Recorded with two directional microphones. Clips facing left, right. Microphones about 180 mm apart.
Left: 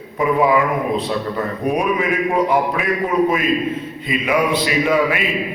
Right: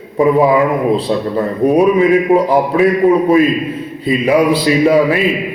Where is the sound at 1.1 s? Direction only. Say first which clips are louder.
Right 6 dB; 30° right (ahead or behind).